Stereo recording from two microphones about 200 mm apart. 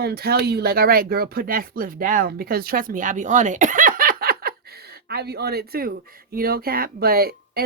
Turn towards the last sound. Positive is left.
turn(degrees=-50)  # may be behind; listen again after turning